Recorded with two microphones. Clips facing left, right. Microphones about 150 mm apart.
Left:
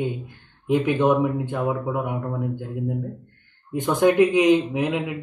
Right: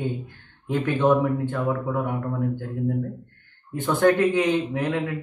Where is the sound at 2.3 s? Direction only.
25° left (ahead or behind).